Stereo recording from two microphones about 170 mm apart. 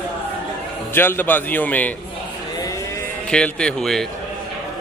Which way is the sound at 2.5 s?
20° left (ahead or behind).